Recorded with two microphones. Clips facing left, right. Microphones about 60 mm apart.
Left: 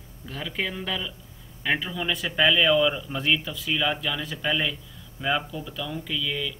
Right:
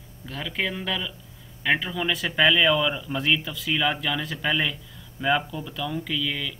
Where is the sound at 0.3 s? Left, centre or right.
Right.